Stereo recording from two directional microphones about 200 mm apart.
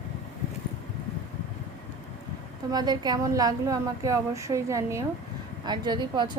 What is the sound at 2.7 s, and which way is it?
A woman's voice, 20° right (ahead or behind).